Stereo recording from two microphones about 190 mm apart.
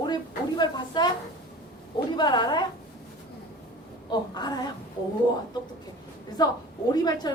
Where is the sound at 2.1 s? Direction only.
20° left (ahead or behind).